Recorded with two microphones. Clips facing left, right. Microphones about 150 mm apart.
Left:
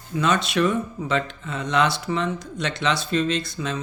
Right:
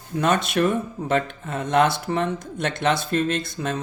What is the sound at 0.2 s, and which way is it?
Speech, 55° right (ahead or behind).